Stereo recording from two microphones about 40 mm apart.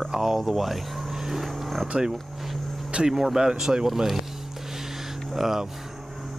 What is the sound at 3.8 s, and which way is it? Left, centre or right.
Speech, centre.